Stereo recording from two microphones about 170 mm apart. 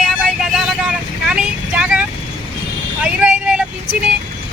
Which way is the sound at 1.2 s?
5° right (ahead or behind).